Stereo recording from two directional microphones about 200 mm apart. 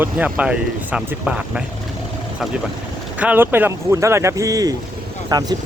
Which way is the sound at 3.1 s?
10° right (ahead or behind).